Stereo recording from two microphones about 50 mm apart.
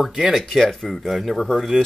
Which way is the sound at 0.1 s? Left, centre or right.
Centre.